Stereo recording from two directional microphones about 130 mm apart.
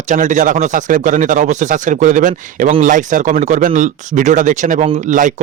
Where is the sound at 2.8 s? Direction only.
80° right.